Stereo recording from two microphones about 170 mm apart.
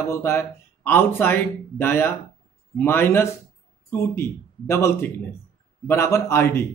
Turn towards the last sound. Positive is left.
turn(degrees=15)  # may be behind; listen again after turning